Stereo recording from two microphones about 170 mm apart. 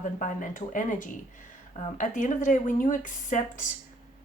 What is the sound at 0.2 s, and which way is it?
Speech, 50° left (ahead or behind).